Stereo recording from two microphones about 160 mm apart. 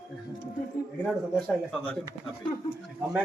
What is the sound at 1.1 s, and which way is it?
Speech, 5° left (ahead or behind).